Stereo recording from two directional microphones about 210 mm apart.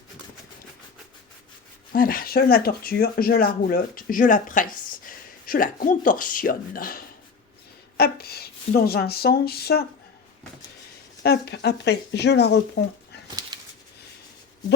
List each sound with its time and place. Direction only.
1.9 s speech: 45° left (ahead or behind)
11.2 s speech: 50° left (ahead or behind)